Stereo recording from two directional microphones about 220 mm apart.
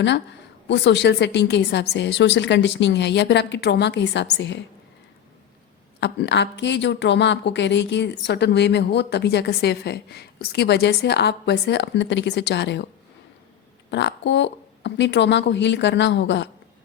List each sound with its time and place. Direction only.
0.7 s a woman's voice: 50° left (ahead or behind)
6.0 s a woman's voice: 50° left (ahead or behind)
13.9 s a woman's voice: 55° left (ahead or behind)